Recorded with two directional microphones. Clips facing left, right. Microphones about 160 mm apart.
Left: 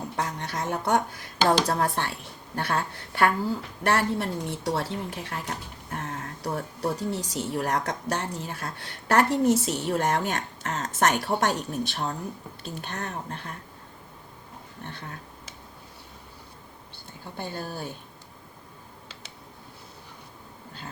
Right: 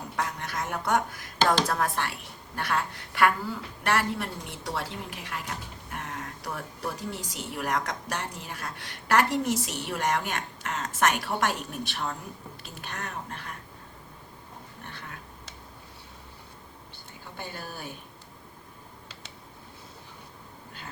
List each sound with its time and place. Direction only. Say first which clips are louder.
0.2 s a sound: left 1 dB; 30° left (ahead or behind)
1.6 s a woman's voice: left 2 dB; 35° left (ahead or behind)
17.3 s a woman's voice: left 5 dB; 30° left (ahead or behind)